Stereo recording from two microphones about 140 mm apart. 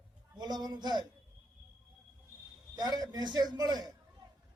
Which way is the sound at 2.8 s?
30° right (ahead or behind).